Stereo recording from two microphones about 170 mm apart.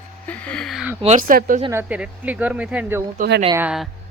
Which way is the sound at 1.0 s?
50° right (ahead or behind).